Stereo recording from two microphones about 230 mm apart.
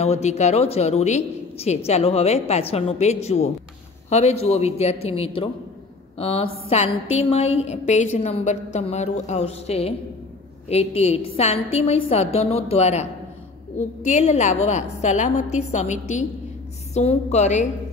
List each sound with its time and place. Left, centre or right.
0.0 s a woman's voice: left